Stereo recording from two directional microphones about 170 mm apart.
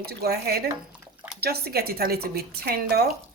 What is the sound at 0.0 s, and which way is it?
A woman's voice, 65° right (ahead or behind).